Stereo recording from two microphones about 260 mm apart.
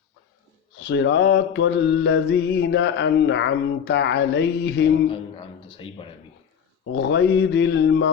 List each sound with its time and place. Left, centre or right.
0.9 s mantra: left
5.0 s speech: centre
6.9 s mantra: left